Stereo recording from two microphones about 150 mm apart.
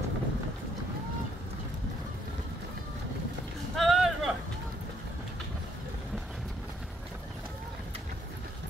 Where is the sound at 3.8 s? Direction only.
Centre (ahead or behind).